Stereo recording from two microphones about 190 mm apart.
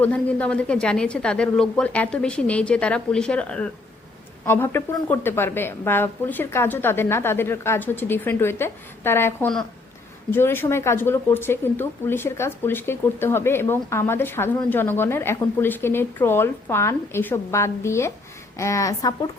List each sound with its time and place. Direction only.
0.0 s speech: 5° left (ahead or behind)